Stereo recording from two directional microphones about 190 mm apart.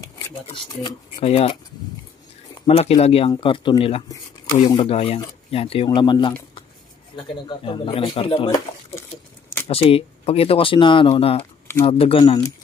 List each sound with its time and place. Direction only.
0.5 s speech: 30° left (ahead or behind)
2.6 s speech: 30° left (ahead or behind)
7.4 s speech: 25° left (ahead or behind)
9.7 s speech: 30° left (ahead or behind)